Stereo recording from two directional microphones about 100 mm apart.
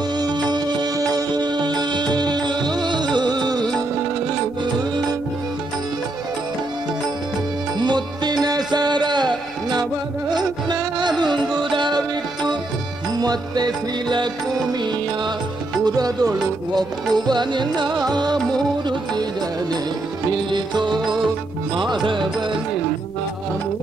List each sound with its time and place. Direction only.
0.2 s music: 45° right (ahead or behind)
7.8 s music: 45° right (ahead or behind)
11.0 s music: 45° right (ahead or behind)
13.2 s music: 40° right (ahead or behind)
15.8 s music: 40° right (ahead or behind)
20.2 s music: 50° right (ahead or behind)